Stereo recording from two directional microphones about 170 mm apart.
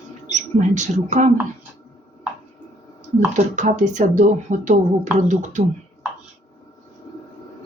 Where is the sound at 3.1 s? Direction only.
45° right (ahead or behind).